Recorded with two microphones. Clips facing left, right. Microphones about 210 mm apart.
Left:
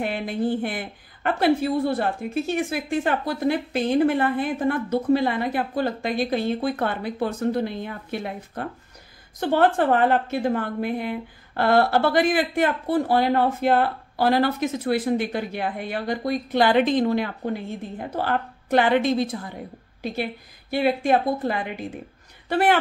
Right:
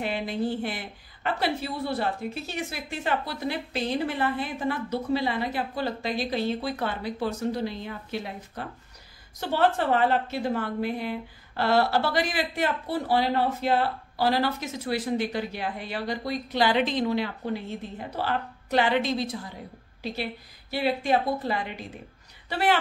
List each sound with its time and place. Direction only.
0.0 s a woman's voice: 50° left (ahead or behind)